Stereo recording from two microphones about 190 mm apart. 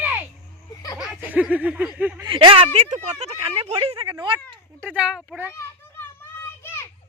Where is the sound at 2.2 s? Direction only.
25° right (ahead or behind).